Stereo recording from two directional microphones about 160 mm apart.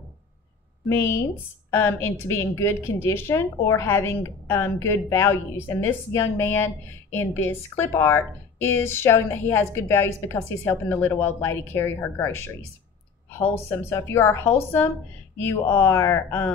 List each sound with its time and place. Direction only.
0.8 s a woman's voice: 15° left (ahead or behind)
13.7 s a woman's voice: 15° left (ahead or behind)